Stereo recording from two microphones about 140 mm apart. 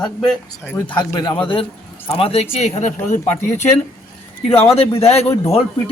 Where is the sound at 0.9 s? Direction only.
30° left (ahead or behind).